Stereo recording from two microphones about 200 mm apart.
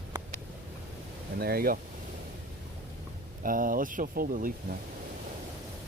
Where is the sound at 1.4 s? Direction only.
50° right (ahead or behind).